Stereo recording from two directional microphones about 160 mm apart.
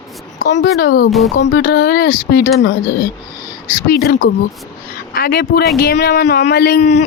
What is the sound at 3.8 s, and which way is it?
Speech, 90° left.